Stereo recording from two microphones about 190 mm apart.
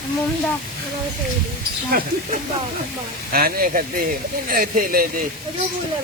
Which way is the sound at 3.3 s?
50° right (ahead or behind).